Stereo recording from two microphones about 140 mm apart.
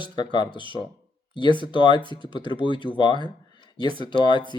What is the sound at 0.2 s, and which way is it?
Speech, 30° left (ahead or behind).